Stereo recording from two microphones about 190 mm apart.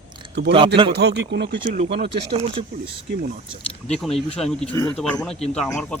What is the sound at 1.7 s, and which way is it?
Speech, 35° right (ahead or behind).